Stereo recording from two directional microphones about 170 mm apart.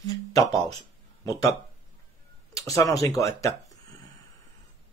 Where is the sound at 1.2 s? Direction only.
20° left (ahead or behind).